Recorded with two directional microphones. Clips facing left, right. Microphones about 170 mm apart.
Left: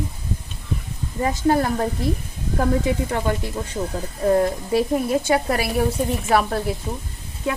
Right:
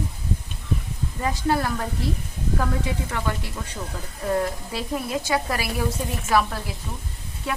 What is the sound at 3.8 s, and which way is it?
Speech, 30° left (ahead or behind).